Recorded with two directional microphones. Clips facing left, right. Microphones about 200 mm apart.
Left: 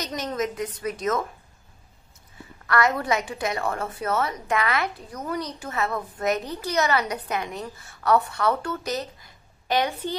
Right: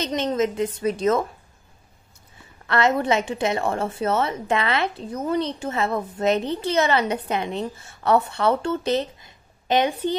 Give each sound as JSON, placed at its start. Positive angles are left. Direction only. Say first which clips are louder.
{"t": 0.0, "sound": "a woman's voice", "louder": "right 6 dB", "side_deg": -25}
{"t": 2.6, "sound": "a woman's voice", "louder": "right 3 dB", "side_deg": -25}